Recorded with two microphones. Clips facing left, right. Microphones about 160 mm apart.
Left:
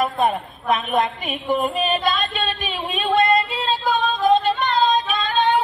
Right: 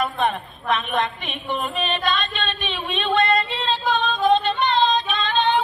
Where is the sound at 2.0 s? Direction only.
40° left (ahead or behind).